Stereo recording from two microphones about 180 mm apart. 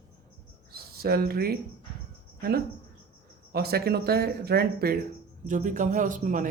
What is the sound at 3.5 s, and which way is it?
A man's voice, 60° right (ahead or behind).